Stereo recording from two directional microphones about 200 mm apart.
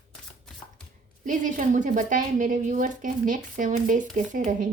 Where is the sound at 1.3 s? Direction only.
40° right (ahead or behind).